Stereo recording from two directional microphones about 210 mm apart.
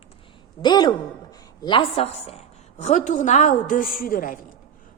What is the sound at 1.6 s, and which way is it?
A woman's voice, 25° left (ahead or behind).